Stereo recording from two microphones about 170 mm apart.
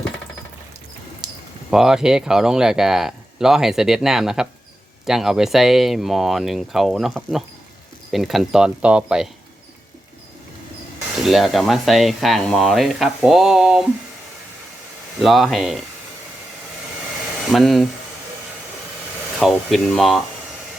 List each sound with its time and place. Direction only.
1.2 s a sound: 25° right (ahead or behind)
1.7 s speech: 5° right (ahead or behind)
11.2 s speech: centre (ahead or behind)
15.2 s speech: centre (ahead or behind)
17.5 s speech: centre (ahead or behind)
19.4 s speech: centre (ahead or behind)